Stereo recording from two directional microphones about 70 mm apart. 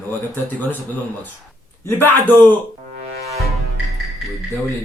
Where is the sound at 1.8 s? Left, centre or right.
Left.